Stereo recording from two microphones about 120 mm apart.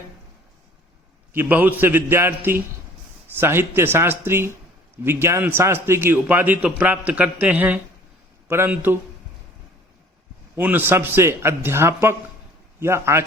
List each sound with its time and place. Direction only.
1.3 s a man's voice: 15° right (ahead or behind)
10.5 s a man's voice: 15° right (ahead or behind)